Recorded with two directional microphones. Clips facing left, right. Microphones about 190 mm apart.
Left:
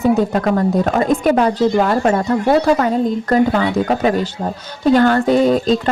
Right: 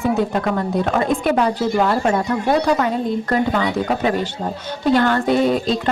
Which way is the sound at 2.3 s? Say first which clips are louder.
Left 4 dB; 35° left (ahead or behind).